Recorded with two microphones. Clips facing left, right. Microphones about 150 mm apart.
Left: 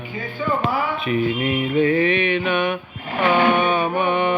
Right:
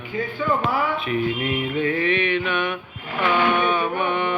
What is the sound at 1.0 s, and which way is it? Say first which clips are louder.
Mantra: left 3 dB; 10° left (ahead or behind).